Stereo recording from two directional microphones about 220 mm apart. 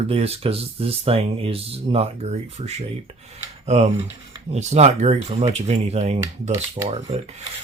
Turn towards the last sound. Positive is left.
turn(degrees=-30)  # may be behind; listen again after turning